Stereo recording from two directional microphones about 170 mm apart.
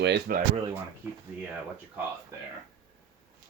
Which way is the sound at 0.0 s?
90° right.